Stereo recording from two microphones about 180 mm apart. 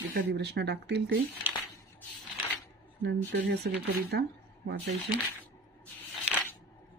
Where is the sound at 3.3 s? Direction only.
65° right (ahead or behind).